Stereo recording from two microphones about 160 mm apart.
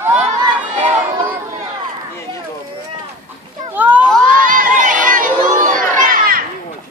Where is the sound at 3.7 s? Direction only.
10° right (ahead or behind).